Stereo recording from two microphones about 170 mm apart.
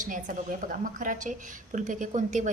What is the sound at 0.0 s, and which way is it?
A woman's voice, 50° right (ahead or behind).